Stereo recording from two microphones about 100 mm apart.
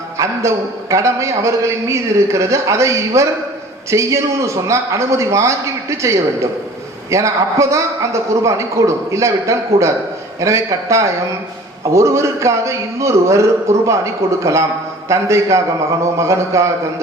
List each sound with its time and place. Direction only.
0.2 s a man's voice: 30° right (ahead or behind)